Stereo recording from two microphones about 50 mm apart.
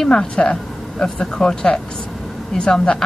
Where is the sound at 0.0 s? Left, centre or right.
Centre.